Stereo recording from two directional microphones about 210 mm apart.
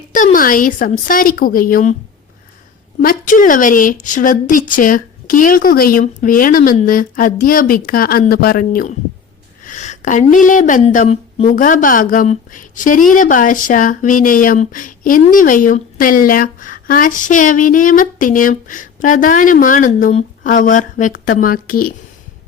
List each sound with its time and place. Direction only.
0.1 s speech: 40° left (ahead or behind)
3.0 s speech: 40° left (ahead or behind)